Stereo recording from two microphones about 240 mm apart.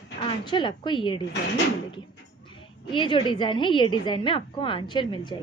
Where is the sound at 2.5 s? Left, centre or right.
Centre.